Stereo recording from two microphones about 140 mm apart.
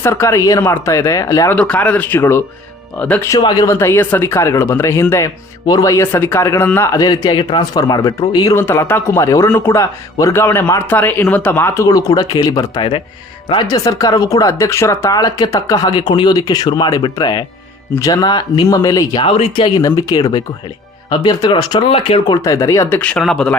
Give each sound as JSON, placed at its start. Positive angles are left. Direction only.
{"t": 0.0, "sound": "speech", "side_deg": 20}
{"t": 1.5, "sound": "speech", "side_deg": 10}
{"t": 3.2, "sound": "speech", "side_deg": 25}
{"t": 8.5, "sound": "speech", "side_deg": 20}
{"t": 19.2, "sound": "speech", "side_deg": 45}
{"t": 22.4, "sound": "speech", "side_deg": 25}
{"t": 23.0, "sound": "speech", "side_deg": 5}